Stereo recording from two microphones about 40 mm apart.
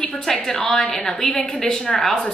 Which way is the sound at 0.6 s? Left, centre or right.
Left.